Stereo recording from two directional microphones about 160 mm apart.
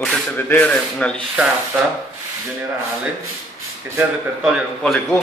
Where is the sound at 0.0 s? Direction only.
10° left (ahead or behind).